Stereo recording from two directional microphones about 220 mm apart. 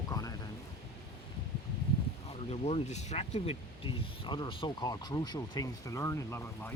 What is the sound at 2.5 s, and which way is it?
Speech, 30° left (ahead or behind).